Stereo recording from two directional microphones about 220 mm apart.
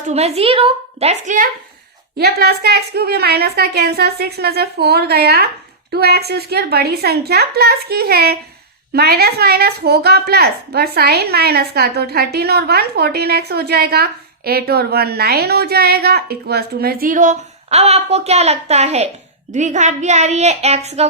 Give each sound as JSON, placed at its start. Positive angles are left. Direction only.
{"t": 0.1, "sound": "a woman's voice", "side_deg": -30}
{"t": 2.1, "sound": "a woman's voice", "side_deg": -45}